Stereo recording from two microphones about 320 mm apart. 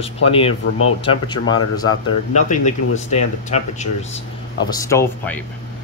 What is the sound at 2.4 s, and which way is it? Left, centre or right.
Speech, left.